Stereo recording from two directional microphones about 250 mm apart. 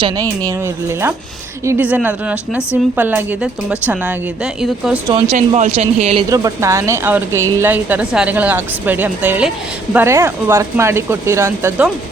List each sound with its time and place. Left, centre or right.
0.0 s a woman's voice: centre
5.0 s a woman's voice: right
6.2 s speech: centre